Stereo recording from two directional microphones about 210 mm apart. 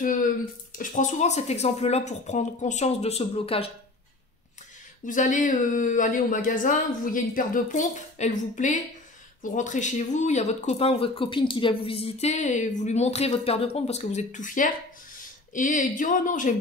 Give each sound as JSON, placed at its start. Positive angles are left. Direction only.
{"t": 0.0, "sound": "speech", "side_deg": 40}
{"t": 5.0, "sound": "speech", "side_deg": 35}